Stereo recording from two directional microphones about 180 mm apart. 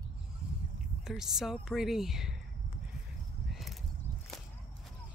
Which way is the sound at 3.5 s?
Centre (ahead or behind).